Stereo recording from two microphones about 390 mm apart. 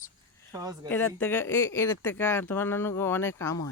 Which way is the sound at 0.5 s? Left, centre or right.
Centre.